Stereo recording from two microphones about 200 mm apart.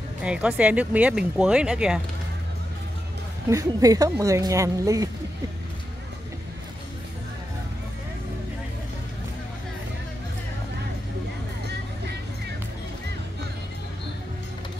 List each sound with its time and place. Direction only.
0.2 s speech: 5° right (ahead or behind)
3.4 s speech: 15° right (ahead or behind)